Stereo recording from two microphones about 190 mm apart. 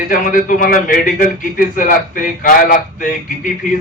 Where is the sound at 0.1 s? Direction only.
45° left (ahead or behind).